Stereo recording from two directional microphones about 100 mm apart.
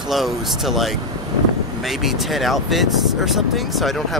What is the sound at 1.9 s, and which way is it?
Speech, centre (ahead or behind).